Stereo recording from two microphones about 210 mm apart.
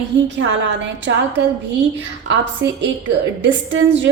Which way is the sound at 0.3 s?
60° right (ahead or behind).